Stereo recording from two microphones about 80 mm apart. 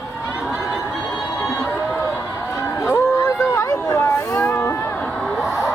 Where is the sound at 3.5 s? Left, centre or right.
Left.